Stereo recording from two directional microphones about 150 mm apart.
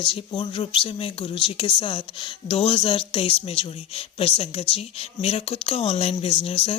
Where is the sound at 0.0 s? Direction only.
35° left (ahead or behind).